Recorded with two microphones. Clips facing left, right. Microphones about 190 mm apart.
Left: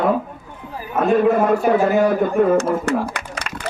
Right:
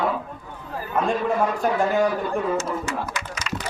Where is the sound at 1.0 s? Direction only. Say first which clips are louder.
Left 8 dB; 65° left (ahead or behind).